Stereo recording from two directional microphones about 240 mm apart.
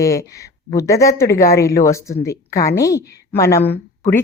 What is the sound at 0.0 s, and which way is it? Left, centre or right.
A woman's voice, centre.